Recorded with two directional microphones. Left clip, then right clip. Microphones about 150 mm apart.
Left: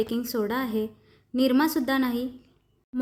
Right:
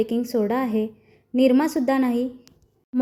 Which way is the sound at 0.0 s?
55° left (ahead or behind).